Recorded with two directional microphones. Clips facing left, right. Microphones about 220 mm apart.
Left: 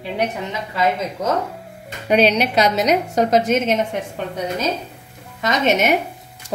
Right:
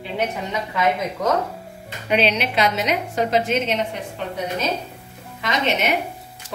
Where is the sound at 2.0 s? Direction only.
40° left (ahead or behind).